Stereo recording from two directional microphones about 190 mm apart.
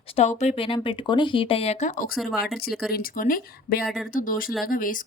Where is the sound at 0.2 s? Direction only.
35° left (ahead or behind).